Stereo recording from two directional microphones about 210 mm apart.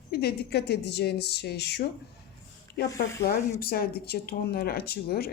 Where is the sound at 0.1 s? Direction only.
50° left (ahead or behind).